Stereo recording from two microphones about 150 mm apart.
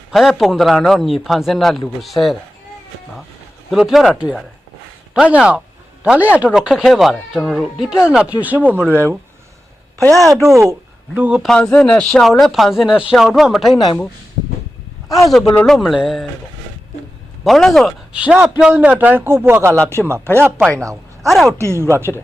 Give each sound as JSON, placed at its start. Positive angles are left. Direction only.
{"t": 0.1, "sound": "speech", "side_deg": 0}
{"t": 3.7, "sound": "speech", "side_deg": 0}
{"t": 11.4, "sound": "speech", "side_deg": 5}
{"t": 15.5, "sound": "speech", "side_deg": 0}
{"t": 17.4, "sound": "speech", "side_deg": 0}
{"t": 21.2, "sound": "speech", "side_deg": 0}
{"t": 21.6, "sound": "speech", "side_deg": -20}